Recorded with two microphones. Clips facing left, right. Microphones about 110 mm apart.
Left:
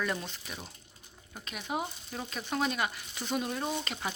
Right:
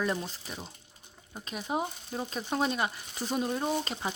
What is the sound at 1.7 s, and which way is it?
Speech, 25° right (ahead or behind).